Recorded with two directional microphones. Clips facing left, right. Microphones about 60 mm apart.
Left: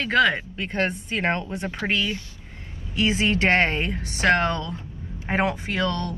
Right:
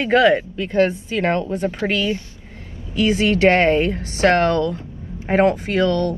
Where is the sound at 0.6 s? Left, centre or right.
Left.